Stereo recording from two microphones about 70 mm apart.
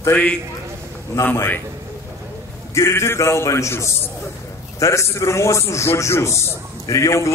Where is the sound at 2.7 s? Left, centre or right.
Left.